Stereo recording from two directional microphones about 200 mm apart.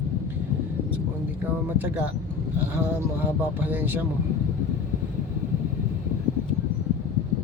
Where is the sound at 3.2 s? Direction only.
10° right (ahead or behind).